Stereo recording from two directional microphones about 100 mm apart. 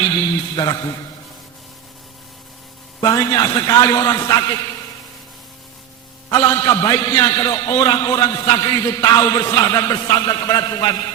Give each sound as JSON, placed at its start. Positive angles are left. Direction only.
{"t": 0.5, "sound": "a man's voice", "side_deg": 45}
{"t": 3.0, "sound": "a man's voice", "side_deg": 40}
{"t": 6.3, "sound": "a man's voice", "side_deg": 30}